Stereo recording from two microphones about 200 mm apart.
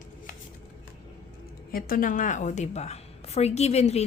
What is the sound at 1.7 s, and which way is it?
A woman's voice, 45° left (ahead or behind).